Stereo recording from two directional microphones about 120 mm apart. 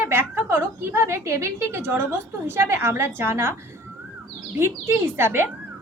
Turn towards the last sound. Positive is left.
turn(degrees=-20)  # may be behind; listen again after turning